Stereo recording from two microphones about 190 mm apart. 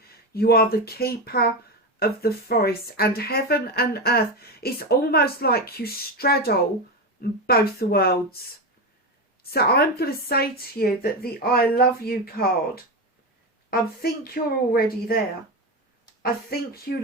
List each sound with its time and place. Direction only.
0.3 s speech: 55° left (ahead or behind)
9.5 s speech: 55° left (ahead or behind)
16.2 s speech: 55° left (ahead or behind)